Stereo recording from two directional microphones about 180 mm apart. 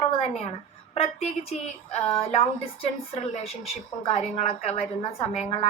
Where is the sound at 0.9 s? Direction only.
35° left (ahead or behind).